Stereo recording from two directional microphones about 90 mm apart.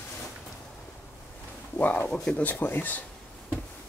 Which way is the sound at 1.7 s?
20° left (ahead or behind).